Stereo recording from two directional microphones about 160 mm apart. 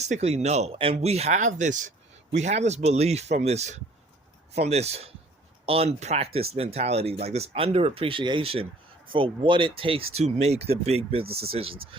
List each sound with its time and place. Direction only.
0.0 s speech: 45° right (ahead or behind)